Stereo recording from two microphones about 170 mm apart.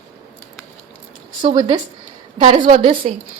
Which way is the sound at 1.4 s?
30° right (ahead or behind).